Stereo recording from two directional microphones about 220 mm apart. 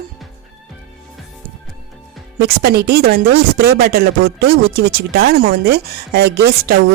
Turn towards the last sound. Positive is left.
turn(degrees=-45)  # may be behind; listen again after turning